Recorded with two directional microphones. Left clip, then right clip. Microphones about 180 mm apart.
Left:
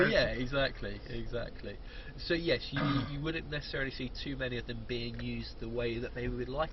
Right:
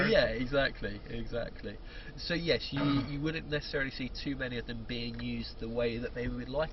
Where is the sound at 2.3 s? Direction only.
25° right (ahead or behind).